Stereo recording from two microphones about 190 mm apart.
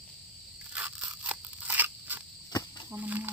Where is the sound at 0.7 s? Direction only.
10° right (ahead or behind).